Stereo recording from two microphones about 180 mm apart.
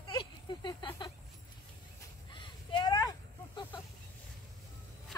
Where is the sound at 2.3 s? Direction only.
25° left (ahead or behind).